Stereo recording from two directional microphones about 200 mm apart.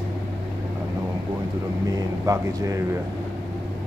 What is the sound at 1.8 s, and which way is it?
Speech, 15° right (ahead or behind).